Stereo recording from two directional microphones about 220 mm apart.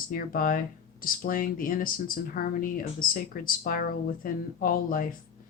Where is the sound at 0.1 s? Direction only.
40° left (ahead or behind).